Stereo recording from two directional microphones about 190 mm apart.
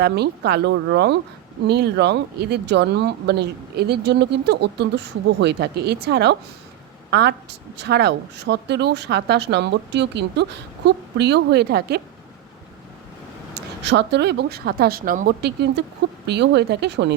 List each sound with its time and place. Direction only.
0.0 s a woman's voice: 60° right (ahead or behind)
13.5 s speech: 60° right (ahead or behind)
15.4 s speech: 65° right (ahead or behind)